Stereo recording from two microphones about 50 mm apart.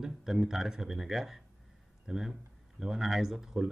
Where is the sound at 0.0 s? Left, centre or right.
Centre.